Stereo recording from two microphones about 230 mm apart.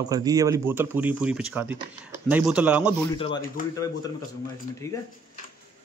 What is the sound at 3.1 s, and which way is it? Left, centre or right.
Speech, left.